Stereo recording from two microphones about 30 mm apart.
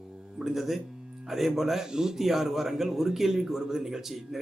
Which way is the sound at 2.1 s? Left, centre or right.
Centre.